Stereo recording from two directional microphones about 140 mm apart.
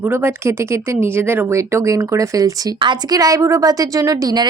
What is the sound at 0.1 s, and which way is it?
A woman's voice, 15° right (ahead or behind).